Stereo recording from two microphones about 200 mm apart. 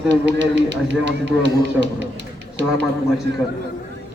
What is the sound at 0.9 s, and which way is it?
Speech, 65° right (ahead or behind).